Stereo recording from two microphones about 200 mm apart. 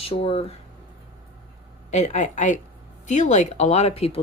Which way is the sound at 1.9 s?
35° left (ahead or behind).